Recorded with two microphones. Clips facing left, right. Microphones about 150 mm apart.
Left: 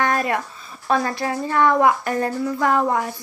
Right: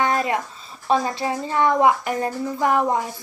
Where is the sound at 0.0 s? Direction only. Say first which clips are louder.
Even; 20° right (ahead or behind).